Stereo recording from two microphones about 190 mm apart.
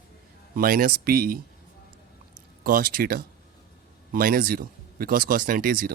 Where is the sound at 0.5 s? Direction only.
50° right (ahead or behind).